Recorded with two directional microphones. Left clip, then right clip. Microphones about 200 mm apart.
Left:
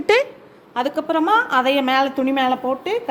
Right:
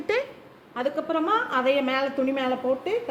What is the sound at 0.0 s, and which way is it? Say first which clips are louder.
A woman's voice: left 10 dB; 45° left (ahead or behind).